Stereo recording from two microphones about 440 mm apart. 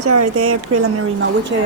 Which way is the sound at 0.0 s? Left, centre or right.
Right.